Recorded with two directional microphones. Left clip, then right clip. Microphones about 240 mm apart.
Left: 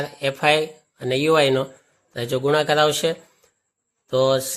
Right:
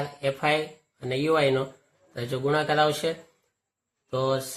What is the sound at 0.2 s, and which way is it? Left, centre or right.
Speech, left.